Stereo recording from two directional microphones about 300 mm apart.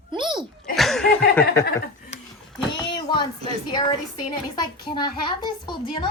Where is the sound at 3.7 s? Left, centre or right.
Centre.